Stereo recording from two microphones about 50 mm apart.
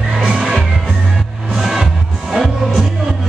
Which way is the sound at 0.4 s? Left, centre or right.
Centre.